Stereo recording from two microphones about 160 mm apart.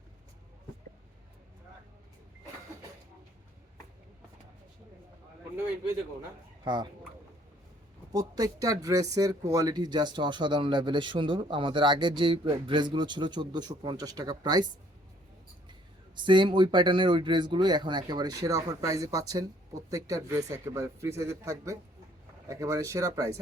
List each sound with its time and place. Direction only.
8.1 s speech: 20° right (ahead or behind)
16.1 s speech: 30° right (ahead or behind)